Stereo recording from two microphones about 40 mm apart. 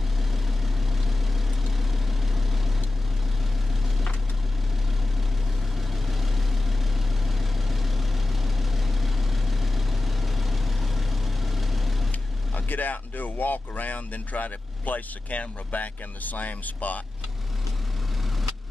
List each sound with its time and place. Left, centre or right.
1.0 s vehicle: centre
5.8 s vehicle: centre
12.1 s speech: left